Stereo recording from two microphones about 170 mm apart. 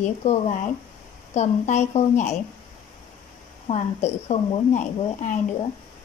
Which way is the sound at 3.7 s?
40° left (ahead or behind).